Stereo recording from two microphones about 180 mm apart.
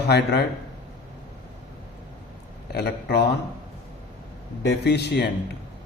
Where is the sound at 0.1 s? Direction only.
65° left (ahead or behind).